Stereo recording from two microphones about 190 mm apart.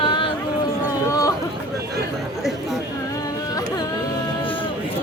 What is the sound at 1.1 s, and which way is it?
Chatter, 20° left (ahead or behind).